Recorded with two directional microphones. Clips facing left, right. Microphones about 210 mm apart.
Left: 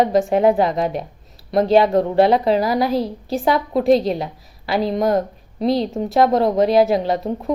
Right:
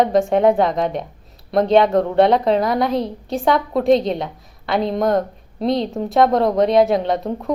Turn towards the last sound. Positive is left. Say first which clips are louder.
# even
turn(degrees=0)  # may be behind; listen again after turning